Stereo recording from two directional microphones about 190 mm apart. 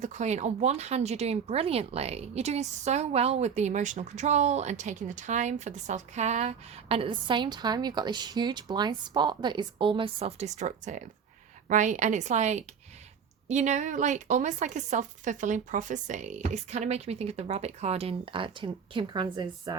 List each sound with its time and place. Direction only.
0.0 s speech: 40° right (ahead or behind)